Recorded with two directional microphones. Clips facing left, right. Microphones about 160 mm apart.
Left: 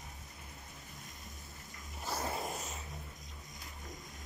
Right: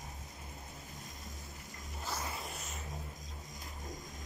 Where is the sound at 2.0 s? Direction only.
45° left (ahead or behind).